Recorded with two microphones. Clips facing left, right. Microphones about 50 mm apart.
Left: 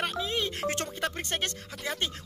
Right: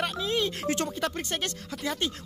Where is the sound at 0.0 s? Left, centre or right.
Centre.